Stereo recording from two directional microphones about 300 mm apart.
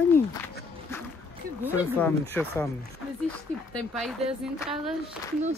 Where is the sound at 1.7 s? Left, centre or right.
Centre.